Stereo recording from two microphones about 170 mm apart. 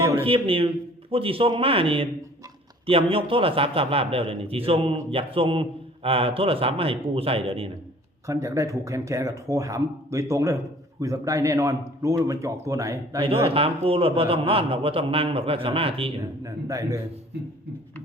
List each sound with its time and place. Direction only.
0.0 s a sound: 15° right (ahead or behind)
0.3 s a man's voice: 30° right (ahead or behind)
8.3 s a man's voice: 20° right (ahead or behind)
13.2 s a man's voice: 35° right (ahead or behind)
16.4 s a man's voice: 20° right (ahead or behind)